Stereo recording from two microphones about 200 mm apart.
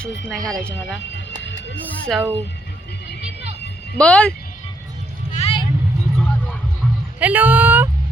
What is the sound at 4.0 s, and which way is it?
Speech, 5° left (ahead or behind).